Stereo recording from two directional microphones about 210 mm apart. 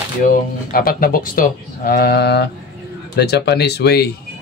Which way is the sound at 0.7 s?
45° left (ahead or behind).